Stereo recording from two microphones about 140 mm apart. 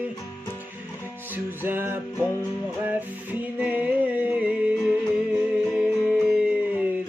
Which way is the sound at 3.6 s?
10° right (ahead or behind).